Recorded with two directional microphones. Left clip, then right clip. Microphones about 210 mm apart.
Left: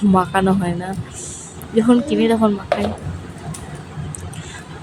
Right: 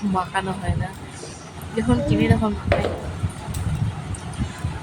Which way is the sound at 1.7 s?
15° left (ahead or behind).